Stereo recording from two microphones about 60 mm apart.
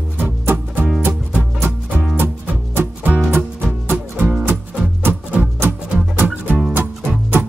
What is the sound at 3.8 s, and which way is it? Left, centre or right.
Music, right.